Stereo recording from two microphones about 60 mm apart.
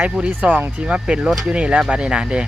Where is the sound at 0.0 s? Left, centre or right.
Right.